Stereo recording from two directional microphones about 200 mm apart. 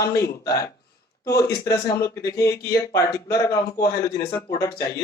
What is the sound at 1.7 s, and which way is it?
A man's voice, 15° left (ahead or behind).